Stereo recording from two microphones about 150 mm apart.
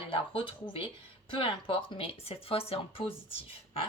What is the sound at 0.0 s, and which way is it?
Speech, 35° left (ahead or behind).